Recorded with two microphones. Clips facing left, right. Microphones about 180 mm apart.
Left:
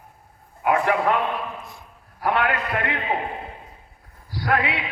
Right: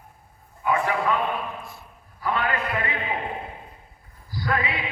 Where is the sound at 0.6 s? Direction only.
65° left (ahead or behind).